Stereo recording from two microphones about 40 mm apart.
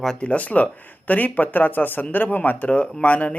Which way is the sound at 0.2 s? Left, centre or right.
Left.